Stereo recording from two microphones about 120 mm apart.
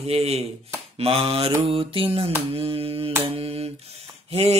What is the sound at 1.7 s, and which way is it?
Mantra, 50° right (ahead or behind).